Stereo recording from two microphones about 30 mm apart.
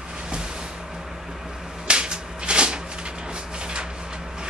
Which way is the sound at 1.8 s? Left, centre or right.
Right.